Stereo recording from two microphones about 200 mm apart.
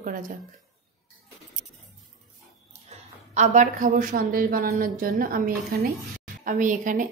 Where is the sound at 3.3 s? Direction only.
40° right (ahead or behind).